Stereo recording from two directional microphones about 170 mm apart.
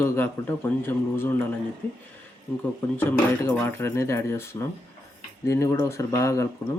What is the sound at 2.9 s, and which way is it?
Speech, 15° left (ahead or behind).